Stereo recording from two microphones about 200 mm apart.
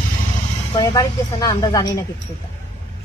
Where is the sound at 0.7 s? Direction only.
20° left (ahead or behind).